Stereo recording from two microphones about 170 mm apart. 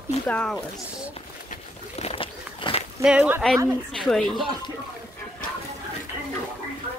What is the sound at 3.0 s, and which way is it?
Speech, 5° right (ahead or behind).